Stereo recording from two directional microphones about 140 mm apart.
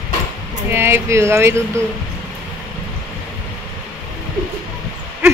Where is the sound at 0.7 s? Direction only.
15° right (ahead or behind).